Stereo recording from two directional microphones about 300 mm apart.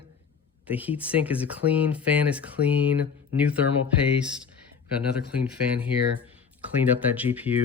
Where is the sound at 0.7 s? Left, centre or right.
Centre.